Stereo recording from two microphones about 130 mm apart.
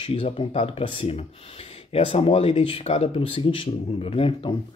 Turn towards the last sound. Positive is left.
turn(degrees=45)  # may be behind; listen again after turning